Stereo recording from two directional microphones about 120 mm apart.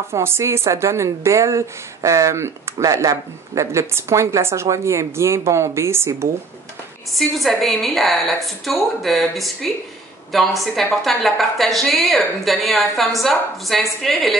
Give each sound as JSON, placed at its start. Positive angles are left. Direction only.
{"t": 0.1, "sound": "a woman's voice", "side_deg": -20}
{"t": 7.2, "sound": "a woman's voice", "side_deg": 0}